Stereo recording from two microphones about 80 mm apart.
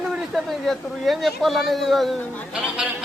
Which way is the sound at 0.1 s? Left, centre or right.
Centre.